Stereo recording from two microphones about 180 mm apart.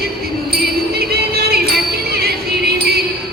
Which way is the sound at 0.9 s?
60° right (ahead or behind).